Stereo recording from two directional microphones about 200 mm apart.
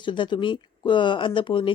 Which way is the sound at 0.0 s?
25° left (ahead or behind).